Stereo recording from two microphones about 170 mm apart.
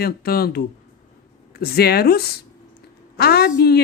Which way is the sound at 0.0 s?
65° left (ahead or behind).